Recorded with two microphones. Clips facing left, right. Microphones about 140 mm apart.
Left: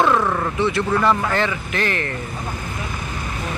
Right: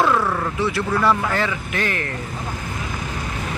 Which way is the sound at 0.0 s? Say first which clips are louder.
Left 1 dB; 20° left (ahead or behind).